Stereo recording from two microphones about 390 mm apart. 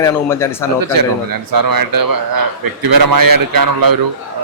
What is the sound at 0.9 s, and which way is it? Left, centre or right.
A man's voice, right.